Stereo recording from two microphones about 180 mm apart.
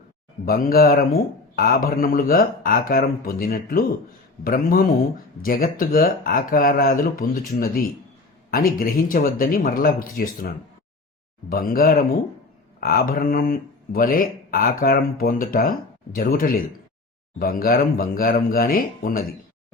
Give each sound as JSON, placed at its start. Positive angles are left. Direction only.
{"t": 0.4, "sound": "speech", "side_deg": 55}